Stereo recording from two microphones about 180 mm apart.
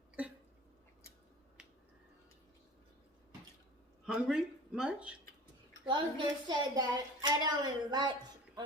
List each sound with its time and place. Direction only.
0.2 s a sound: 10° right (ahead or behind)
4.0 s speech: 5° right (ahead or behind)
5.8 s a woman's voice: 25° right (ahead or behind)